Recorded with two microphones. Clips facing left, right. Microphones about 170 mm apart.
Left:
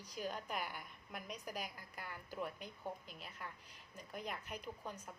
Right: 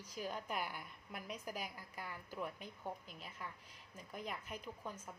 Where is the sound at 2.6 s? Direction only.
Centre (ahead or behind).